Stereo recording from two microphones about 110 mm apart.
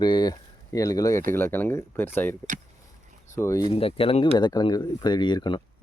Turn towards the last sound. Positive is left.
turn(degrees=45)  # may be behind; listen again after turning